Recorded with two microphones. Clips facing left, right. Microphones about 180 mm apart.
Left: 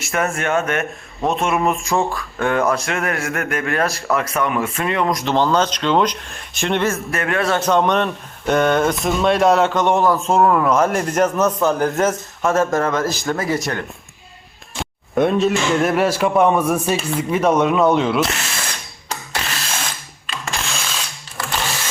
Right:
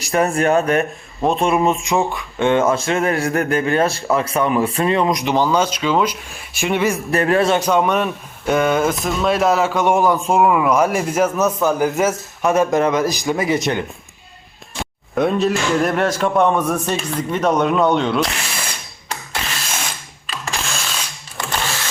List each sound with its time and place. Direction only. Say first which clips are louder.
0.1 s speech: right 4 dB; 35° right (ahead or behind)
1.2 s speech: right 2 dB; centre (ahead or behind)
2.0 s speech: right 3 dB; 20° right (ahead or behind)
5.0 s a man's voice: right 1 dB; 15° right (ahead or behind)
7.1 s speech: right 5 dB; 35° right (ahead or behind)
7.4 s a man's voice: right 1 dB; 15° right (ahead or behind)
12.5 s a man's voice: right 2 dB; 15° right (ahead or behind)
14.8 s speech: left 1 dB; centre (ahead or behind)
19.6 s drill: even; 5° right (ahead or behind)